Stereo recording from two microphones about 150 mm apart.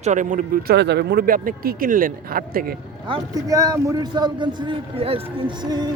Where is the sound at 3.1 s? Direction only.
25° right (ahead or behind); by 5.5 s 40° right (ahead or behind).